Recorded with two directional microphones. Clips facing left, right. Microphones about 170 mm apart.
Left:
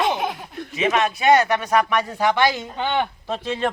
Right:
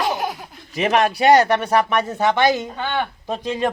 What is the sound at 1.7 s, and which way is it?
Speech, 25° right (ahead or behind).